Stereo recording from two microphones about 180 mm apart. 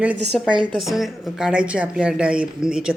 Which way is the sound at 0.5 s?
25° right (ahead or behind).